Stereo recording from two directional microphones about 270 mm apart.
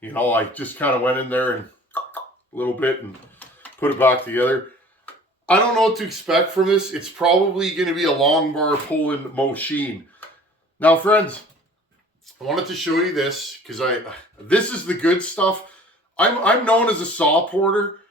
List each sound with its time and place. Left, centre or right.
0.0 s speech: centre